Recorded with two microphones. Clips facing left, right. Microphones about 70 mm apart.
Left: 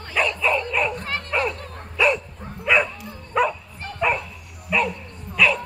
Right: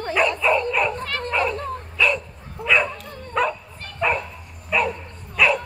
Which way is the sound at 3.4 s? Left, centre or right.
Centre.